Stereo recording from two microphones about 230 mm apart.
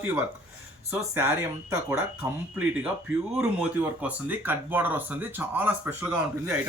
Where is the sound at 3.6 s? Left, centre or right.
Centre.